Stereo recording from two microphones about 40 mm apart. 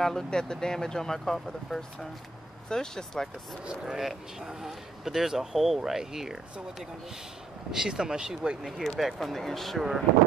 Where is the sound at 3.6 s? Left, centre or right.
Right.